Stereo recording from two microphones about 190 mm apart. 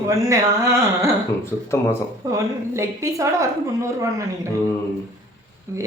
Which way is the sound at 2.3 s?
15° right (ahead or behind).